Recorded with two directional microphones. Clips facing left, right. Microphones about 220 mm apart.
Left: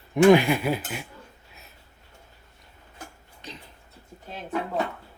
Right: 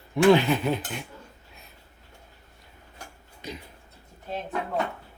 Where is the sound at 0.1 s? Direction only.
15° left (ahead or behind).